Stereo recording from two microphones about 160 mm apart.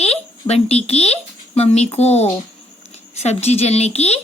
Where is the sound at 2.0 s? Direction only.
40° left (ahead or behind).